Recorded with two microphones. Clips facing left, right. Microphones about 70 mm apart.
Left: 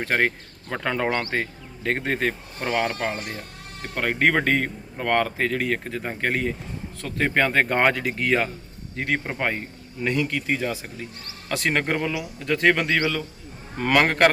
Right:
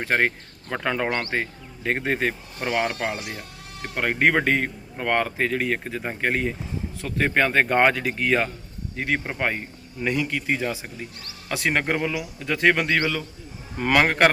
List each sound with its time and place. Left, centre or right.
0.0 s a man's voice: centre
3.2 s speech: left
3.9 s a man's voice: centre